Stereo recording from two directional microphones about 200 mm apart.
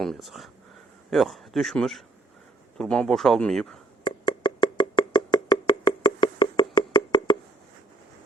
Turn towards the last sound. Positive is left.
turn(degrees=20)  # may be behind; listen again after turning